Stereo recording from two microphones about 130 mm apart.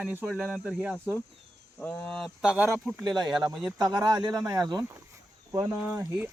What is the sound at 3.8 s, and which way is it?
Speech, 30° right (ahead or behind).